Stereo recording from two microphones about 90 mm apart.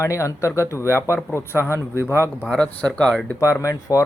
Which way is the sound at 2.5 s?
15° left (ahead or behind).